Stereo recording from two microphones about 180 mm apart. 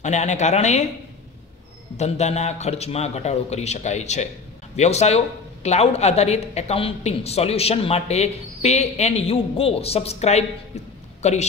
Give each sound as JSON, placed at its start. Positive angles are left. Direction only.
{"t": 0.0, "sound": "speech", "side_deg": 40}
{"t": 2.0, "sound": "speech", "side_deg": 40}